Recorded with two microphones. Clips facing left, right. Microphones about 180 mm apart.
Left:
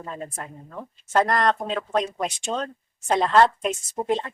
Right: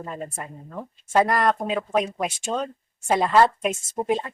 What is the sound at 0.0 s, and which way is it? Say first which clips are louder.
A woman's voice: right 1 dB; 5° right (ahead or behind).